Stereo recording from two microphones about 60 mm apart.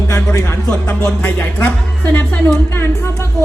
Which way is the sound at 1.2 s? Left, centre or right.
Left.